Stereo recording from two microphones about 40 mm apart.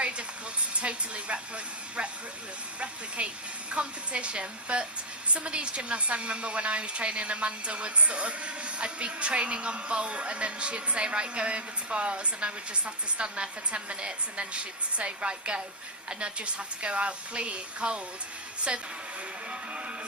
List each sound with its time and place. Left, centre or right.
0.7 s a woman's voice: right
3.2 s a woman's voice: right